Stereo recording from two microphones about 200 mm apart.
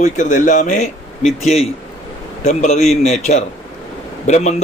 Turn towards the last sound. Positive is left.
turn(degrees=35)  # may be behind; listen again after turning